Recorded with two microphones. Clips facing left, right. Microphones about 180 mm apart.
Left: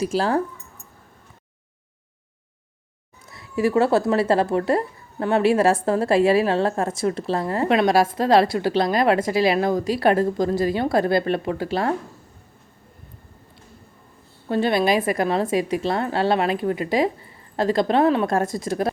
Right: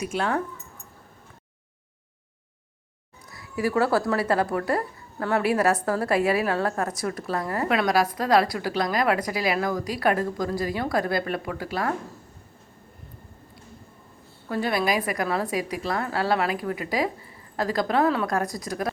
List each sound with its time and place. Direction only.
0.0 s speech: 35° left (ahead or behind)
3.2 s speech: 25° left (ahead or behind)
14.4 s speech: 25° left (ahead or behind)